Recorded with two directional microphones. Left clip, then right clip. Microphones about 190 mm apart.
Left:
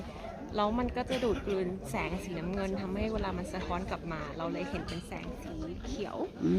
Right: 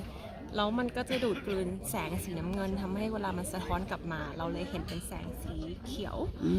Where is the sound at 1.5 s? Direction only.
60° right (ahead or behind).